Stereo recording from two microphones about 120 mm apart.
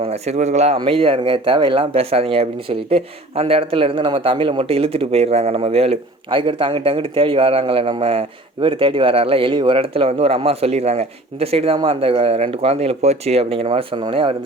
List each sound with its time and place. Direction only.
0.0 s speech: 60° right (ahead or behind)
0.9 s speech: 50° right (ahead or behind)